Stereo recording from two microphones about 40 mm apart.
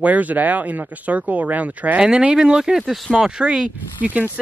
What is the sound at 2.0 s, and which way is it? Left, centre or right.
Speech, right.